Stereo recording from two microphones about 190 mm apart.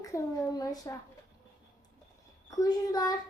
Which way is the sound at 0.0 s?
20° left (ahead or behind).